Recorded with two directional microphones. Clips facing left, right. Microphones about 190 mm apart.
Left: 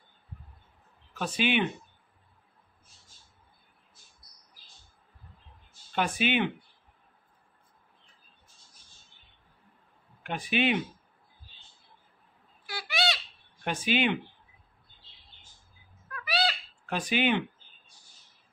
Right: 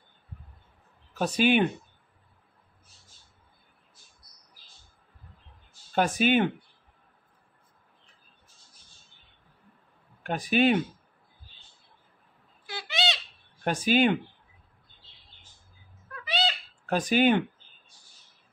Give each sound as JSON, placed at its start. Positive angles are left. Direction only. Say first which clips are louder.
{"t": 1.1, "sound": "speech", "louder": "right 5 dB", "side_deg": -40}
{"t": 5.9, "sound": "speech", "louder": "right 4 dB", "side_deg": -40}
{"t": 10.2, "sound": "speech", "louder": "right 5 dB", "side_deg": -40}
{"t": 12.6, "sound": "bird", "louder": "even", "side_deg": -20}
{"t": 13.7, "sound": "speech", "louder": "right 5 dB", "side_deg": -40}
{"t": 16.1, "sound": "a sound", "louder": "even", "side_deg": -20}
{"t": 16.8, "sound": "speech", "louder": "right 5 dB", "side_deg": -40}